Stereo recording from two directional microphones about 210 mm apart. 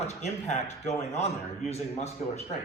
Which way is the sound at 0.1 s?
30° left (ahead or behind).